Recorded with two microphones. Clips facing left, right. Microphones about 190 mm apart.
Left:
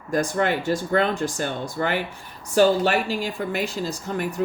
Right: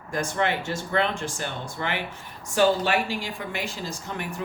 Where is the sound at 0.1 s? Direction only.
40° left (ahead or behind).